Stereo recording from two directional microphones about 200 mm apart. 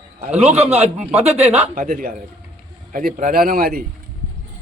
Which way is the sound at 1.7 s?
45° right (ahead or behind).